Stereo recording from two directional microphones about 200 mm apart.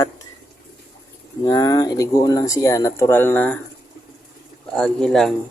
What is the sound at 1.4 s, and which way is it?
Speech, 20° left (ahead or behind).